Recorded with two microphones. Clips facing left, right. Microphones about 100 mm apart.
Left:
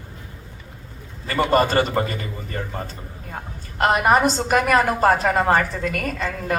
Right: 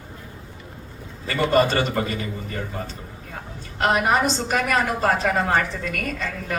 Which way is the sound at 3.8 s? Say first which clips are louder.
Left 3 dB; 45° left (ahead or behind).